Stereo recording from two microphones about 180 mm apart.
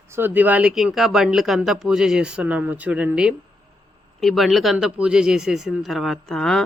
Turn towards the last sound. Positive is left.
turn(degrees=5)  # may be behind; listen again after turning